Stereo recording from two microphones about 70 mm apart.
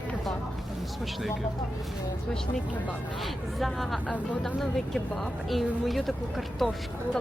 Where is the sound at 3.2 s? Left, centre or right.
Centre.